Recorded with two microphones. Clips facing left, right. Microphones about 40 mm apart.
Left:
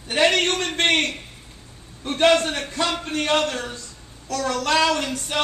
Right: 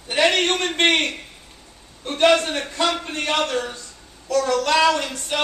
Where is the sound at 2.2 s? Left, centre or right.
Centre.